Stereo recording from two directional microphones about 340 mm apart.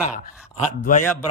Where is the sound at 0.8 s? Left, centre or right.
Left.